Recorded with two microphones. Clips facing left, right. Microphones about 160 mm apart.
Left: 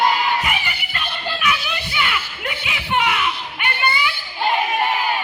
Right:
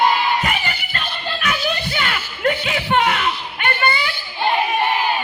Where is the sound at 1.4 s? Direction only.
45° right (ahead or behind).